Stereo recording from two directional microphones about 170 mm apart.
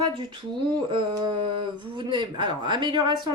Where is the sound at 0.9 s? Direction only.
30° right (ahead or behind).